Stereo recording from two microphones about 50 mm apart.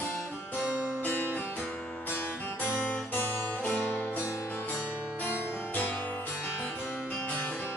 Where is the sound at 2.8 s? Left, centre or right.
Left.